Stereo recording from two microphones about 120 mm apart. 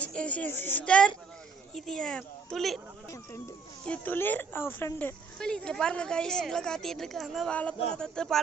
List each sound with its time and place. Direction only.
0.0 s a woman's voice: 10° left (ahead or behind)
3.8 s speech: 10° left (ahead or behind)
5.4 s a woman's voice: 5° left (ahead or behind)